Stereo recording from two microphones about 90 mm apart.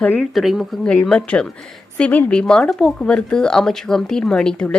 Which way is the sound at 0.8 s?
10° left (ahead or behind).